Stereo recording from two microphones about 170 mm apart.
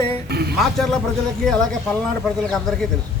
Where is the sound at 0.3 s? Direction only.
70° right (ahead or behind).